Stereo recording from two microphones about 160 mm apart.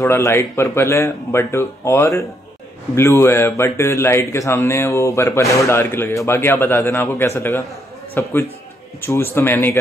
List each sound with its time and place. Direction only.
0.0 s a man's voice: 15° left (ahead or behind)